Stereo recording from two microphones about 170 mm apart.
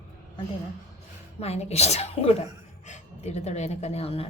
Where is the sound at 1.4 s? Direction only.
40° left (ahead or behind).